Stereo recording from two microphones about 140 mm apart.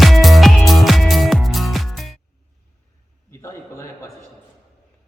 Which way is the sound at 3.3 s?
20° left (ahead or behind).